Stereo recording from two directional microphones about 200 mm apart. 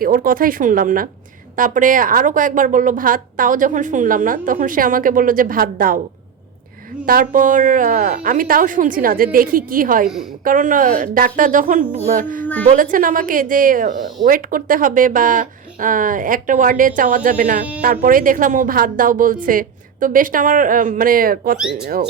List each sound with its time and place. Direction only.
0.0 s a woman's voice: 45° right (ahead or behind)
7.0 s a woman's voice: 45° right (ahead or behind)
21.6 s speech: 5° right (ahead or behind)